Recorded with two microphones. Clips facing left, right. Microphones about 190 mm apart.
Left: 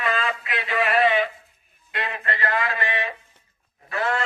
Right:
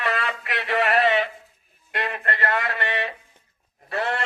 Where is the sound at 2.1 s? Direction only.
60° right (ahead or behind).